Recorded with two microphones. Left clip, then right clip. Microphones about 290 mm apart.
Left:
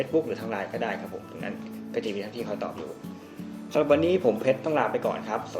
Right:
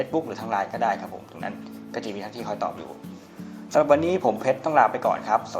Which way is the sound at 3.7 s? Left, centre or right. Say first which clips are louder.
Right 3 dB; centre.